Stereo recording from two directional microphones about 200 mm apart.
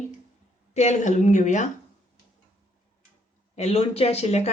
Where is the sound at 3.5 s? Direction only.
30° left (ahead or behind).